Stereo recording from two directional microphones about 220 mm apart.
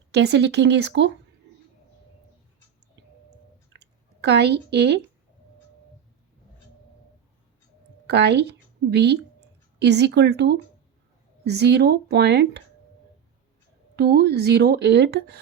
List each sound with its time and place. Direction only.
0.1 s speech: 50° right (ahead or behind)
3.7 s a sound: 50° right (ahead or behind)
8.0 s a woman's voice: 50° right (ahead or behind)
13.9 s speech: 45° right (ahead or behind)